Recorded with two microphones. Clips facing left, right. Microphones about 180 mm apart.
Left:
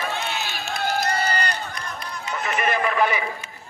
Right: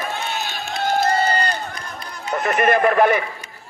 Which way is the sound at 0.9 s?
25° right (ahead or behind).